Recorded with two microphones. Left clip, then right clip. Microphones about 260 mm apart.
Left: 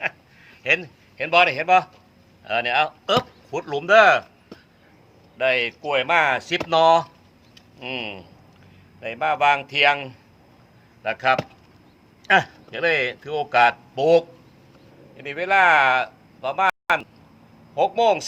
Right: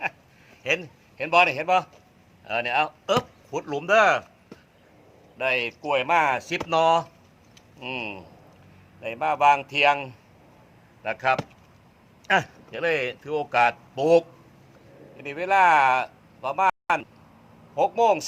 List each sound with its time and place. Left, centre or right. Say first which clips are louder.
0.6 s a man's voice: left 5 dB; centre
5.4 s speech: left 4 dB; centre